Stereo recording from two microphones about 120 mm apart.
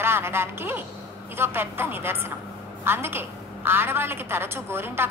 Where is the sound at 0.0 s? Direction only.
20° right (ahead or behind).